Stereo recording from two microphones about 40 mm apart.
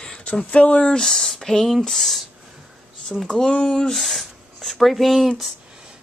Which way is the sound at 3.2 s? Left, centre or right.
Left.